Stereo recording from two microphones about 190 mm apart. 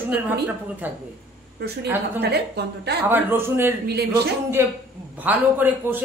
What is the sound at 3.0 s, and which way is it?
Speech, 10° right (ahead or behind).